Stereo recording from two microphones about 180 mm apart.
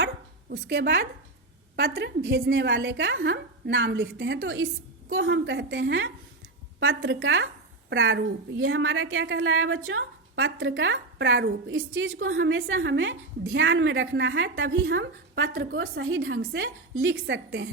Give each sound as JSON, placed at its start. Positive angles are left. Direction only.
{"t": 0.5, "sound": "a woman's voice", "side_deg": -65}